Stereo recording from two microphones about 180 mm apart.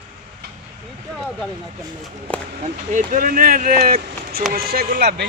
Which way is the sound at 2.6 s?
45° right (ahead or behind).